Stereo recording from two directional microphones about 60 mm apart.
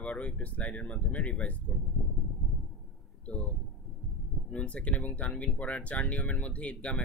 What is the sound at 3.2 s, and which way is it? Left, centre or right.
Speech, left.